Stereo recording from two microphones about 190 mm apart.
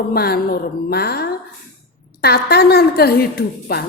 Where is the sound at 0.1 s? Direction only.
55° left (ahead or behind).